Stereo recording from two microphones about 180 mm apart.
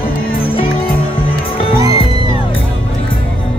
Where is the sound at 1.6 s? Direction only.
30° left (ahead or behind).